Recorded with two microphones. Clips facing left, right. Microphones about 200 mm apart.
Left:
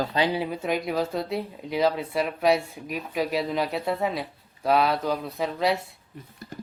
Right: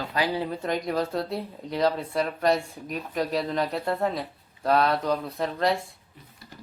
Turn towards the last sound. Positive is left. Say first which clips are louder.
# even
turn(degrees=5)  # may be behind; listen again after turning